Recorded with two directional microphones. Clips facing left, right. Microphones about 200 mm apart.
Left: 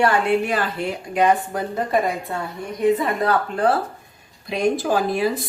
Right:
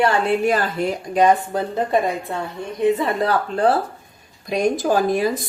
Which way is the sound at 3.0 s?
30° right (ahead or behind).